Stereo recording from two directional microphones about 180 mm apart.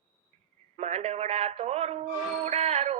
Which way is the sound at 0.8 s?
40° right (ahead or behind).